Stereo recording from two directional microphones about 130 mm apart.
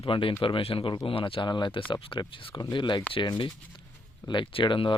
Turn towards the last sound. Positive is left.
turn(degrees=40)  # may be behind; listen again after turning